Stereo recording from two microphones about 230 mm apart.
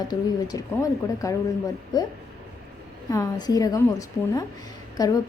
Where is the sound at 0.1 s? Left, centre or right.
Centre.